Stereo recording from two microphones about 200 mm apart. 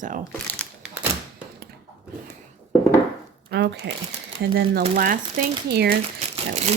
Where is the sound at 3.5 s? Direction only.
60° right (ahead or behind).